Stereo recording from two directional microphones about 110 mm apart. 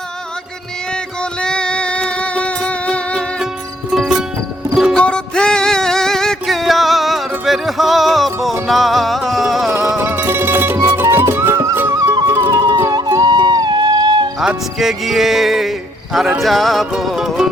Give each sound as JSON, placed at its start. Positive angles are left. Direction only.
{"t": 1.2, "sound": "music", "side_deg": 10}
{"t": 3.9, "sound": "music", "side_deg": -5}
{"t": 9.6, "sound": "music", "side_deg": -30}
{"t": 12.8, "sound": "music", "side_deg": -35}
{"t": 14.3, "sound": "music", "side_deg": 0}
{"t": 16.1, "sound": "speech", "side_deg": 0}